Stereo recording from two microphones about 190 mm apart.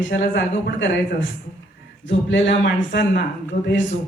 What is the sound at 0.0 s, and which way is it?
A man's voice, 70° left (ahead or behind).